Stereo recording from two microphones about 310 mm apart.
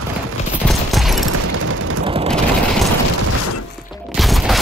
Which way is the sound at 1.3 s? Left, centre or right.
Right.